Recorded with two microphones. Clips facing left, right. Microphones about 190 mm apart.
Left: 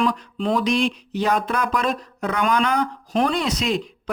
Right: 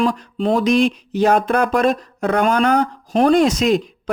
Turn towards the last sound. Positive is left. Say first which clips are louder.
# right 9 dB
turn(degrees=-45)  # may be behind; listen again after turning